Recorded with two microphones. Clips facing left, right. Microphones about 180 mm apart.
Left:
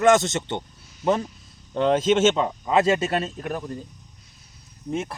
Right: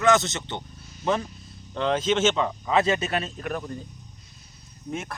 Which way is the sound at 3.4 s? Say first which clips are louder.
Left 1 dB; 15° left (ahead or behind).